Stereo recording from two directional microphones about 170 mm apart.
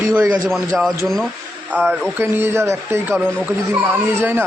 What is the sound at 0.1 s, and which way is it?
Speech, 20° right (ahead or behind).